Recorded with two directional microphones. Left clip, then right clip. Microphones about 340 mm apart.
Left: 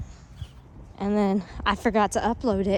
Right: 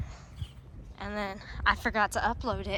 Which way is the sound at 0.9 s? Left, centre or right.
Left.